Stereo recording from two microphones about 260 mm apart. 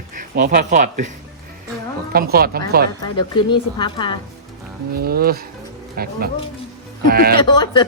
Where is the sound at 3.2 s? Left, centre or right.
Centre.